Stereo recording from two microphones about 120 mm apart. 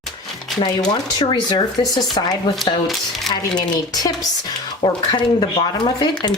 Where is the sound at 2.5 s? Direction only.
Centre (ahead or behind).